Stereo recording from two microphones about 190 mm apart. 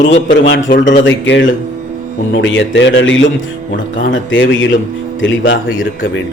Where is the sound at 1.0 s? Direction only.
70° left (ahead or behind).